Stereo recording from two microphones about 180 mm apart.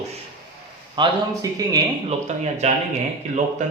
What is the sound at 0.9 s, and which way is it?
Speech, 20° right (ahead or behind).